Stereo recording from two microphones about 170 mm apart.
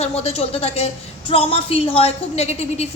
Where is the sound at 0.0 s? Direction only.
35° left (ahead or behind).